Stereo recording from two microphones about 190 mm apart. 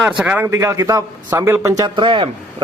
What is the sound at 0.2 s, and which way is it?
A man's voice, 10° right (ahead or behind).